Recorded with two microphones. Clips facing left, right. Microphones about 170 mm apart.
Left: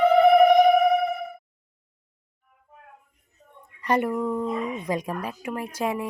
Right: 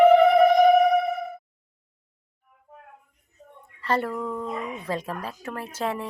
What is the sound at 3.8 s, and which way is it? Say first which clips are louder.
Speech: left 3 dB; 15° left (ahead or behind).